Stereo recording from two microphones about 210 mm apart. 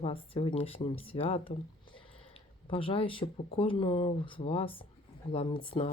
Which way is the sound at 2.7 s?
25° left (ahead or behind).